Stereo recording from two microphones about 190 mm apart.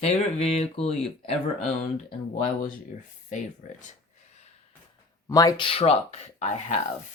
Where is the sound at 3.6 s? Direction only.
40° left (ahead or behind).